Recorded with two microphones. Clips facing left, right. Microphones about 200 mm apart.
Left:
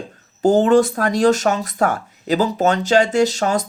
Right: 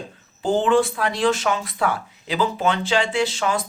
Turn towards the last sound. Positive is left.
turn(degrees=40)  # may be behind; listen again after turning